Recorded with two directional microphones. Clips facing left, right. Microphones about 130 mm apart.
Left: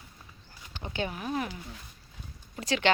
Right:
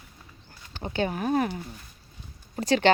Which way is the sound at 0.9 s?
40° right (ahead or behind).